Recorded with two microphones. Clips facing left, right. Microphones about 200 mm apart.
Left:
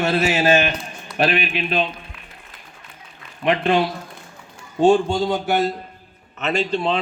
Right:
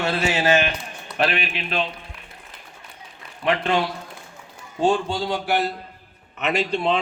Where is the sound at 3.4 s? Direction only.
25° left (ahead or behind).